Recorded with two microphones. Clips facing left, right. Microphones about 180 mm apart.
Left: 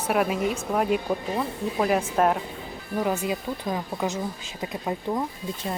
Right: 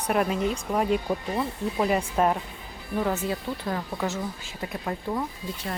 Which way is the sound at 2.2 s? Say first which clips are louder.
Left 1 dB; centre (ahead or behind).